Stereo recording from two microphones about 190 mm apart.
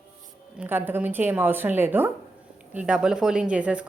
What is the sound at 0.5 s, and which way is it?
A woman's voice, 10° right (ahead or behind).